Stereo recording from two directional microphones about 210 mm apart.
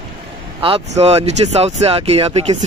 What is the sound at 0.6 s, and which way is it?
Speech, 30° right (ahead or behind).